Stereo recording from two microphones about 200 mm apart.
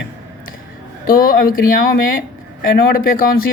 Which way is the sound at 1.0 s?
45° left (ahead or behind).